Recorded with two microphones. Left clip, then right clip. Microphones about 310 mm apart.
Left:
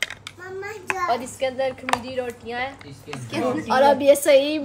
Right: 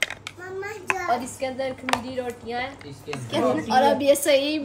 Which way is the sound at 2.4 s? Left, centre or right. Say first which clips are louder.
Left 1 dB; left.